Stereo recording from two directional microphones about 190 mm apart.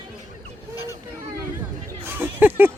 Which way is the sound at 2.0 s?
10° right (ahead or behind).